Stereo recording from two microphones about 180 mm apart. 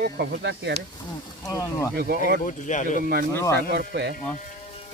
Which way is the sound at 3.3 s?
15° left (ahead or behind).